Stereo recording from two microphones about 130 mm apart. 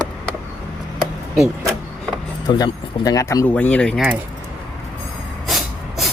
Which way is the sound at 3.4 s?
10° left (ahead or behind).